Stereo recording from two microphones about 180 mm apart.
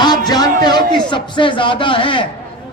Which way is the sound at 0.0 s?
20° left (ahead or behind).